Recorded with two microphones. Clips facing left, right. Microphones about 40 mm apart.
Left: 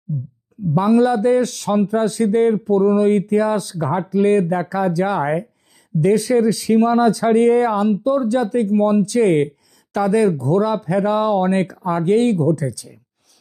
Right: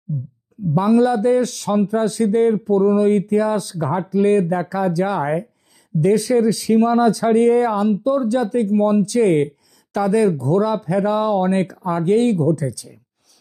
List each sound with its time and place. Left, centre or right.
0.8 s speech: left